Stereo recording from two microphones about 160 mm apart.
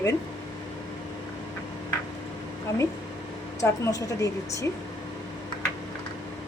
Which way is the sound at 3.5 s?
20° left (ahead or behind).